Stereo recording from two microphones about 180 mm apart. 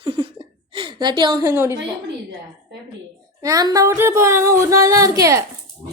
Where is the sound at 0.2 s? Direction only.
25° right (ahead or behind).